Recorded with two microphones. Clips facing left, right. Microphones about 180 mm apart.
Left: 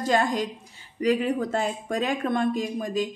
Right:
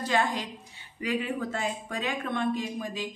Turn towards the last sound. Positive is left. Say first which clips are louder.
# left 6 dB
turn(degrees=45)  # may be behind; listen again after turning